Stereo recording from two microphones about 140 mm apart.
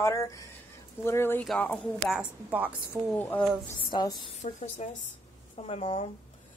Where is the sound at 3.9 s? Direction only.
30° left (ahead or behind).